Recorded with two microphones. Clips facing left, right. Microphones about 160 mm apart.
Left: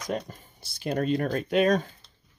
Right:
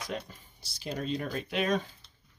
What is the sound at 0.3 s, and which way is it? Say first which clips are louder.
Speech: left 6 dB; 50° left (ahead or behind).